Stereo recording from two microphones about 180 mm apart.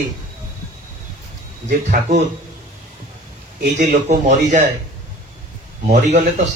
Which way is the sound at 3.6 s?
45° right (ahead or behind).